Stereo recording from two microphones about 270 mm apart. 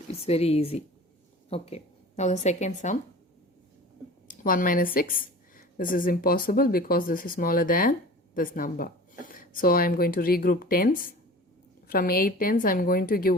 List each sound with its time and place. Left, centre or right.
0.3 s a woman's voice: left
4.3 s speech: left